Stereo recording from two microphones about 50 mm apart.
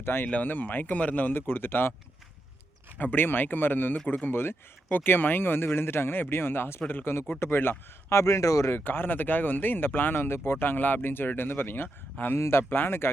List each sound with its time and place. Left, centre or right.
0.0 s speech: left
0.4 s speech: left
1.4 s speech: left
3.0 s speech: left
3.9 s speech: left
8.1 s speech: left
8.7 s speech: left
12.4 s speech: left